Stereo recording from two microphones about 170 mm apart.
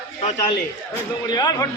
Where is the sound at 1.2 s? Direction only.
25° left (ahead or behind).